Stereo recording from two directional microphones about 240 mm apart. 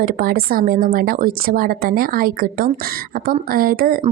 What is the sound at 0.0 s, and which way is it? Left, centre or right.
A woman's voice, right.